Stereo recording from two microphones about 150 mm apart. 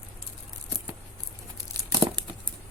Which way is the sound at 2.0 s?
30° right (ahead or behind).